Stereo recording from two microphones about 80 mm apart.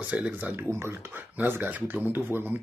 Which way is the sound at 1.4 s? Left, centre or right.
Right.